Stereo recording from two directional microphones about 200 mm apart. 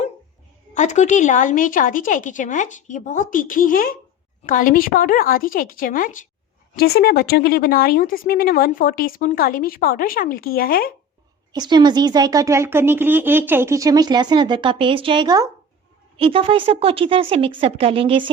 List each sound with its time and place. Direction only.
0.7 s a woman's voice: 35° left (ahead or behind)
11.5 s speech: 20° right (ahead or behind)